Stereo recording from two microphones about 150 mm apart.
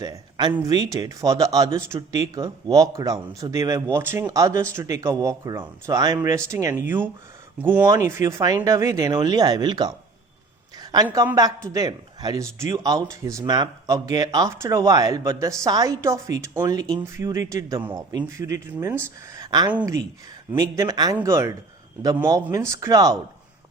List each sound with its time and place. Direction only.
0.0 s a man's voice: 25° right (ahead or behind)
19.4 s a sound: 25° right (ahead or behind)
19.8 s speech: 20° right (ahead or behind)